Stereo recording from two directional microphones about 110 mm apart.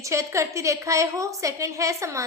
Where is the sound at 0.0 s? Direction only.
30° right (ahead or behind).